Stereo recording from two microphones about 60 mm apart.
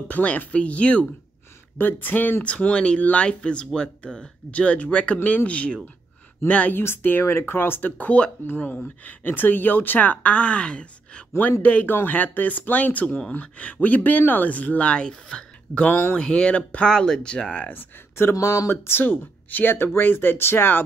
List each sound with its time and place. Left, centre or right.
0.1 s speech: left
1.8 s speech: left
2.4 s speech: centre
6.8 s speech: left; by 11.2 s centre
11.6 s speech: left
16.2 s speech: centre
18.7 s speech: left